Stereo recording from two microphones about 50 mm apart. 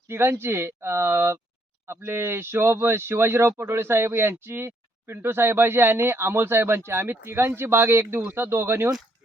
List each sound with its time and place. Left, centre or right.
0.1 s speech: right